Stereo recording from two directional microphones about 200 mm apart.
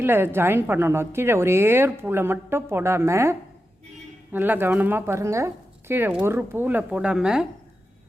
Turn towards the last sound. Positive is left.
turn(degrees=-5)  # may be behind; listen again after turning